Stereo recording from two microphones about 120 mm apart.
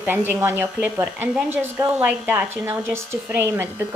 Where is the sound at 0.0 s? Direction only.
15° right (ahead or behind).